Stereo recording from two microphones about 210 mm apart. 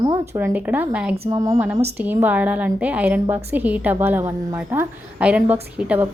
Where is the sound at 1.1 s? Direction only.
25° right (ahead or behind).